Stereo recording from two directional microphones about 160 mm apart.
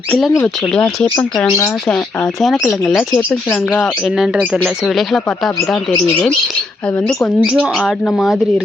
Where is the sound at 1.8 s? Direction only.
5° left (ahead or behind).